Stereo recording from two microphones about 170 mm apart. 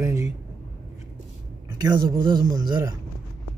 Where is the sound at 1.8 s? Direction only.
20° right (ahead or behind).